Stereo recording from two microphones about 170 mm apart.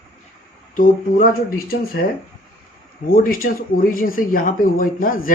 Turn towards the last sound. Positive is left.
turn(degrees=55)  # may be behind; listen again after turning